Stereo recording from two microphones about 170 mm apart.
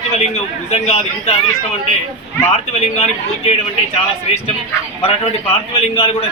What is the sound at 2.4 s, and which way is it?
Speech, 40° left (ahead or behind).